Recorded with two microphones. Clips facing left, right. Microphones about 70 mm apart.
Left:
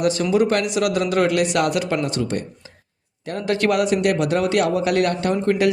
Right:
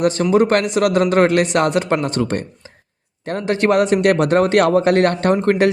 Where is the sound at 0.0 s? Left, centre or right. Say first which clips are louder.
Right 3 dB; right.